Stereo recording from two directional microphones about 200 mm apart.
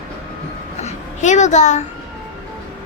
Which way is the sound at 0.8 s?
35° left (ahead or behind).